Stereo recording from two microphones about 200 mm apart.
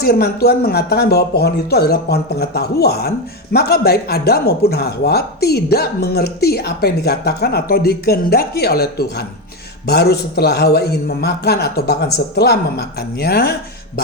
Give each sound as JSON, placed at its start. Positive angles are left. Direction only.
{"t": 0.0, "sound": "speech", "side_deg": 50}